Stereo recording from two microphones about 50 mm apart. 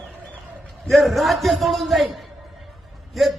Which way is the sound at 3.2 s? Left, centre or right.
Centre.